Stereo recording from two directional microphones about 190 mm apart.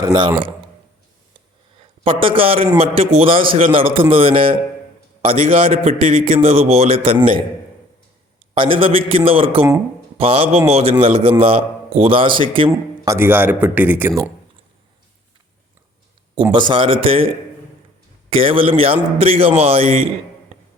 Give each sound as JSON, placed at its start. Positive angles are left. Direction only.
{"t": 2.0, "sound": "a man's voice", "side_deg": -30}
{"t": 8.5, "sound": "a man's voice", "side_deg": -30}
{"t": 13.1, "sound": "speech", "side_deg": -10}
{"t": 16.3, "sound": "a man's voice", "side_deg": -25}